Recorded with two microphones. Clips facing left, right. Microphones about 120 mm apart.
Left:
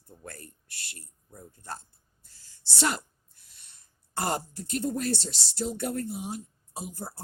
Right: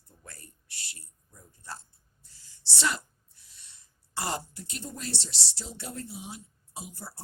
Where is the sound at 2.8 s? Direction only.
50° left (ahead or behind).